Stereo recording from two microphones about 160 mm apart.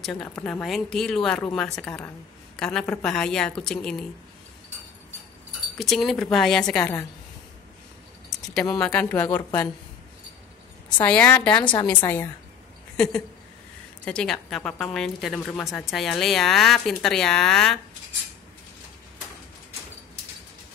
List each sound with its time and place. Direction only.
0.0 s a woman's voice: centre (ahead or behind)
5.8 s a woman's voice: centre (ahead or behind)
6.8 s speech: 15° left (ahead or behind)
8.7 s speech: 10° left (ahead or behind)
11.0 s speech: 10° left (ahead or behind)
12.9 s a woman's voice: 5° left (ahead or behind)